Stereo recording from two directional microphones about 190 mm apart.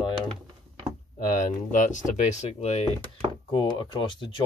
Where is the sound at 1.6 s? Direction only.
45° left (ahead or behind).